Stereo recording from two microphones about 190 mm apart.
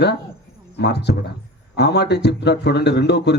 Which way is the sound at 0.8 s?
60° left (ahead or behind).